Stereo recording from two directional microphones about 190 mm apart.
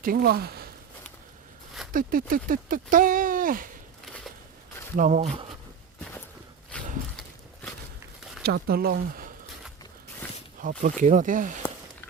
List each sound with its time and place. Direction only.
0.0 s speech: 50° right (ahead or behind)
1.9 s speech: 45° right (ahead or behind)
4.0 s a sound: 5° left (ahead or behind)
4.9 s speech: 40° right (ahead or behind)
6.7 s a sound: 5° left (ahead or behind)
8.4 s speech: 55° right (ahead or behind)
10.6 s speech: 45° right (ahead or behind)